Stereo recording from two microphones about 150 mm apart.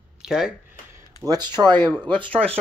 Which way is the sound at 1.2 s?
30° right (ahead or behind).